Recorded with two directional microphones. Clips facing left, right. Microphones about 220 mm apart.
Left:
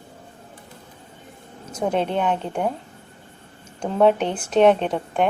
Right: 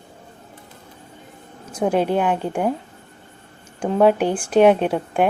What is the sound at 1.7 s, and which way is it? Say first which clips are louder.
Speech: right 3 dB; 5° right (ahead or behind).